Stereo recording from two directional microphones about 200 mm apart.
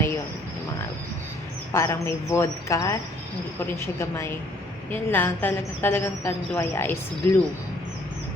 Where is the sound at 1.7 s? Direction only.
15° left (ahead or behind).